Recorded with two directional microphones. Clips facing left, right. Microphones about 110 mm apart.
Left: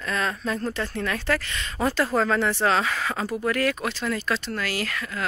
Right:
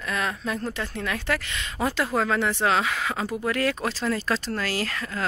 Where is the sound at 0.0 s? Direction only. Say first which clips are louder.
Left 1 dB; 10° right (ahead or behind).